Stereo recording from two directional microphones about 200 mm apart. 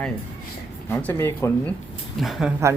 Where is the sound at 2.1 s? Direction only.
Centre (ahead or behind).